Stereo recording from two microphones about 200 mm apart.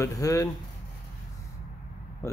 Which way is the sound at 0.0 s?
15° left (ahead or behind).